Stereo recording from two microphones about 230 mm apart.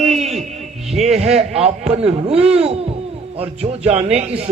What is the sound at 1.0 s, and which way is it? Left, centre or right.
Speech, right.